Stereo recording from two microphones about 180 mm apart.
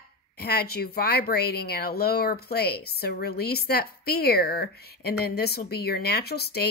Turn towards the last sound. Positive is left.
turn(degrees=60)  # may be behind; listen again after turning